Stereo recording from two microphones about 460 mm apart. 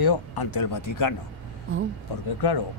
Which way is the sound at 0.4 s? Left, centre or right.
Left.